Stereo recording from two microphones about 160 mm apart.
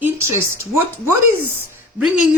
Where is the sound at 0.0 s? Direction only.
15° right (ahead or behind).